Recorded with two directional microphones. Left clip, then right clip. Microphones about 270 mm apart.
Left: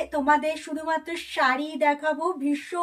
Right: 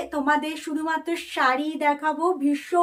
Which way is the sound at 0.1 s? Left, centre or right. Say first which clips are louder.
Left 1 dB; centre.